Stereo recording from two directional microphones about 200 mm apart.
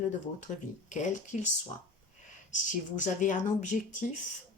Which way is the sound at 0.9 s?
35° left (ahead or behind).